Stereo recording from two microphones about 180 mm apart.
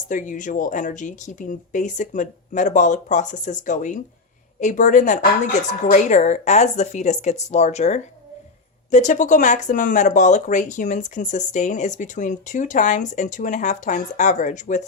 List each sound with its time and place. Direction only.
0.1 s speech: 45° left (ahead or behind)